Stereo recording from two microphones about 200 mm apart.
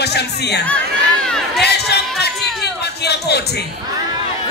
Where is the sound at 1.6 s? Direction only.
55° left (ahead or behind).